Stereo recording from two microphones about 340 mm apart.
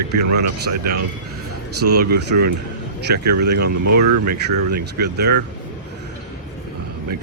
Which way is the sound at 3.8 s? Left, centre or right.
Right.